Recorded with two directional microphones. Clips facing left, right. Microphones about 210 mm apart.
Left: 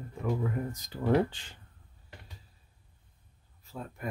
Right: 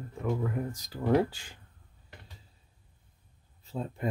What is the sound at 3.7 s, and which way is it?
Speech, 25° right (ahead or behind).